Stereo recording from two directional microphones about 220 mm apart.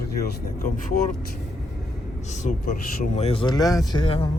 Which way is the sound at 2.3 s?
40° left (ahead or behind).